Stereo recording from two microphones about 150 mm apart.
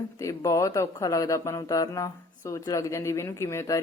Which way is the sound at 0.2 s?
20° left (ahead or behind).